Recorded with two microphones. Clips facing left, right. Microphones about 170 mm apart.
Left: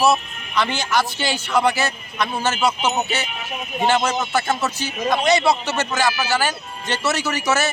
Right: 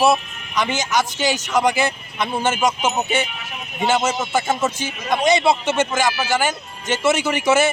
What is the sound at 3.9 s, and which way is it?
Speech, 10° right (ahead or behind).